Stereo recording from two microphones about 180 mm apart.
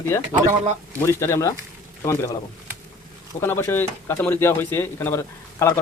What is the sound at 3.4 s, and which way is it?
Speech, 15° left (ahead or behind).